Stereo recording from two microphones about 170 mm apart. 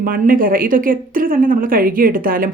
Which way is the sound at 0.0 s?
55° right (ahead or behind).